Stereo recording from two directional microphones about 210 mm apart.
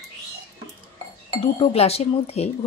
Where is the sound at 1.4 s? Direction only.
30° left (ahead or behind).